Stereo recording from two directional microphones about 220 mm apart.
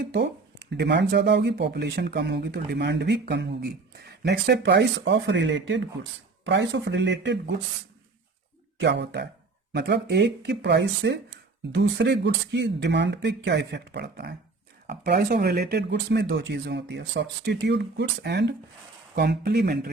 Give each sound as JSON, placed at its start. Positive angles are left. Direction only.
{"t": 0.1, "sound": "speech", "side_deg": -50}
{"t": 8.8, "sound": "speech", "side_deg": -50}